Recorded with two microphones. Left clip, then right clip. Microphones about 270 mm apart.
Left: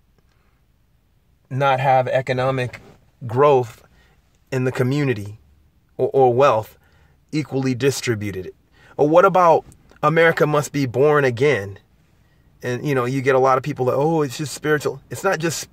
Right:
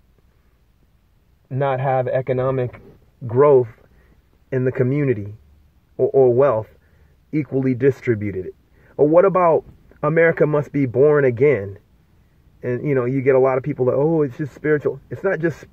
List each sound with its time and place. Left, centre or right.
1.5 s speech: centre